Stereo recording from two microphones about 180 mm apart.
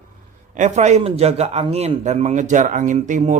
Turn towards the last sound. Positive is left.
turn(degrees=-45)  # may be behind; listen again after turning